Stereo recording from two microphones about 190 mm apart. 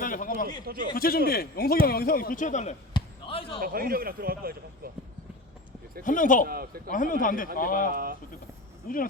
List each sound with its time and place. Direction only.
0.0 s a sound: 45° left (ahead or behind)
0.4 s a man's voice: 50° right (ahead or behind)
0.9 s speech: 50° left (ahead or behind)
2.9 s basketball bounce: 30° left (ahead or behind)
3.6 s a man's voice: 50° right (ahead or behind)
6.1 s speech: 45° left (ahead or behind)
6.5 s a man's voice: 55° right (ahead or behind)
6.9 s speech: 45° left (ahead or behind)